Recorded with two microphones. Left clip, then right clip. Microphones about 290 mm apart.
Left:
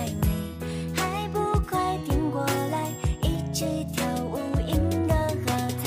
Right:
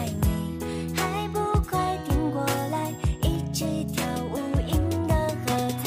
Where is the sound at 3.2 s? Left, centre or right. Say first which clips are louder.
Even; centre.